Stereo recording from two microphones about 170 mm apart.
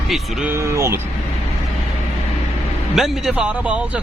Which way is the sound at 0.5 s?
15° right (ahead or behind).